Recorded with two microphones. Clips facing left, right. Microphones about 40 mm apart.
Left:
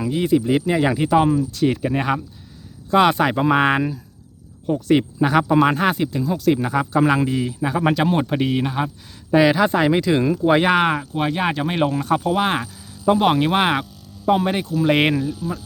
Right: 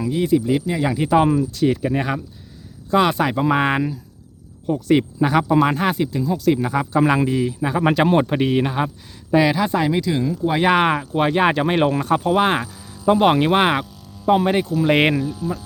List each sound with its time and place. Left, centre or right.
0.0 s speech: centre
0.3 s speech: left
0.9 s a man's voice: centre
1.6 s a man's voice: centre
6.7 s a man's voice: centre
8.0 s speech: centre
9.3 s speech: centre
9.6 s speech: centre
9.9 s speech: left
10.7 s speech: centre
11.3 s speech: right
12.3 s speech: centre
12.5 s speech: centre